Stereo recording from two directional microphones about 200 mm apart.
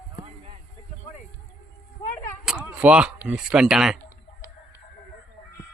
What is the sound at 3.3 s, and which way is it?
Speech, 5° right (ahead or behind).